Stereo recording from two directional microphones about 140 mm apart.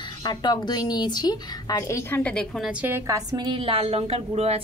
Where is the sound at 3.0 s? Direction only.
25° right (ahead or behind); by 4.6 s 50° right (ahead or behind).